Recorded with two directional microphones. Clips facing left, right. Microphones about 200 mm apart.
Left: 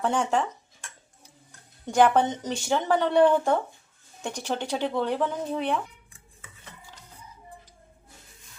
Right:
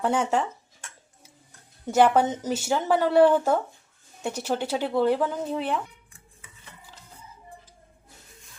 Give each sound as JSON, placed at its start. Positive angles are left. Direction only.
{"t": 0.0, "sound": "speech", "side_deg": -5}
{"t": 1.9, "sound": "speech", "side_deg": -10}